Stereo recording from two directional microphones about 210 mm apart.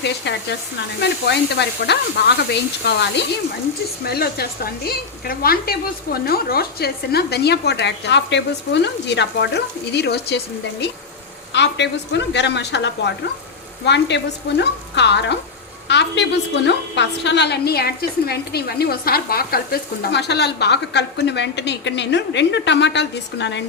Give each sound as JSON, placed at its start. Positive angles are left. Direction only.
{"t": 0.0, "sound": "a woman's voice", "side_deg": 55}